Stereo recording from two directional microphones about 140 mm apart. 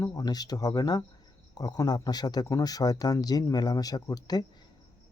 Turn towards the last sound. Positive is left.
turn(degrees=30)  # may be behind; listen again after turning